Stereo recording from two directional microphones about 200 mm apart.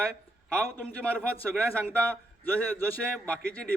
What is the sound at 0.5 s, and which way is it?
A man's voice, 10° left (ahead or behind).